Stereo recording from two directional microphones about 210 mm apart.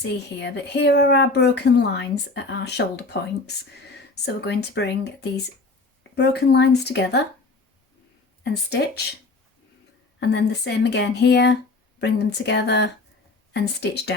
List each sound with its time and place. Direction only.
0.0 s speech: 55° left (ahead or behind)
8.4 s speech: 55° left (ahead or behind)
10.2 s speech: 55° left (ahead or behind)